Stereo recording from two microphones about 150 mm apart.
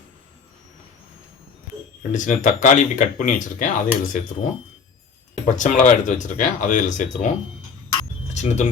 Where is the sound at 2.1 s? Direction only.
55° left (ahead or behind).